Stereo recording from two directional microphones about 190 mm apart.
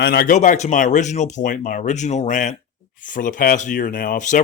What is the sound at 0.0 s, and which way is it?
Speech, 55° left (ahead or behind).